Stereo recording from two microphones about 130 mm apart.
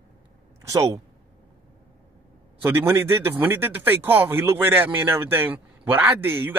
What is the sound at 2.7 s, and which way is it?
Speech, 20° right (ahead or behind).